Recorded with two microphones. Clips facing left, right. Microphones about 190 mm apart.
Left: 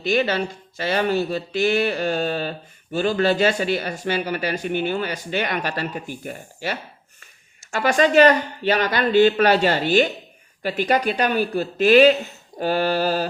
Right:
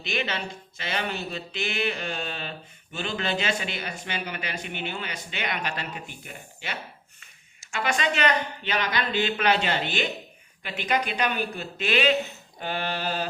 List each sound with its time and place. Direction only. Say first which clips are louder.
0.0 s speech: left 10 dB; 40° left (ahead or behind)